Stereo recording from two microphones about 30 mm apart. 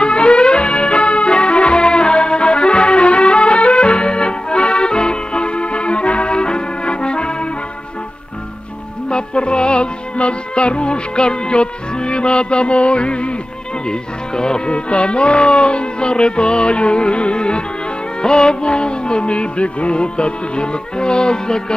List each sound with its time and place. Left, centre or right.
0.0 s music: left
9.1 s music: left
13.8 s speech: left
14.7 s music: left